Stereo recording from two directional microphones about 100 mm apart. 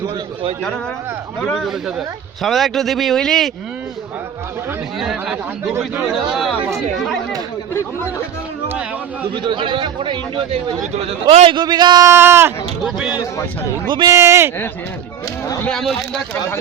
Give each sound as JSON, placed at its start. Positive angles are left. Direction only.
{"t": 1.4, "sound": "a man's voice", "side_deg": 5}
{"t": 1.6, "sound": "a man's voice", "side_deg": -5}
{"t": 4.9, "sound": "a man's voice", "side_deg": -5}
{"t": 9.3, "sound": "a man's voice", "side_deg": -50}
{"t": 11.5, "sound": "a man's voice", "side_deg": -45}
{"t": 12.0, "sound": "speech", "side_deg": -25}
{"t": 12.8, "sound": "a man's voice", "side_deg": -5}
{"t": 13.8, "sound": "a man's voice", "side_deg": -45}
{"t": 14.1, "sound": "speech", "side_deg": -25}
{"t": 15.6, "sound": "a man's voice", "side_deg": 5}